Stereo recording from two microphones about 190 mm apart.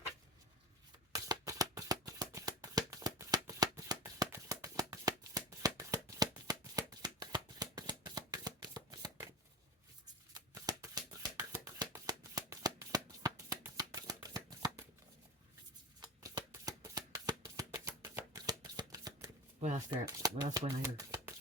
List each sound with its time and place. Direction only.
1.1 s shuffling cards: 20° right (ahead or behind)
10.3 s shuffling cards: 20° right (ahead or behind)
16.0 s shuffling cards: 20° right (ahead or behind)
19.5 s shuffling cards: 35° right (ahead or behind)
19.9 s speech: 20° right (ahead or behind)